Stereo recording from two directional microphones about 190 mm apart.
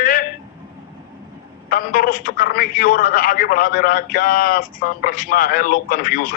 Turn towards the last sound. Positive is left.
turn(degrees=50)  # may be behind; listen again after turning